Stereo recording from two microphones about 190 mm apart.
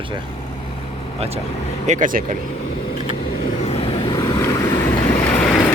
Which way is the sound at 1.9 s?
45° right (ahead or behind).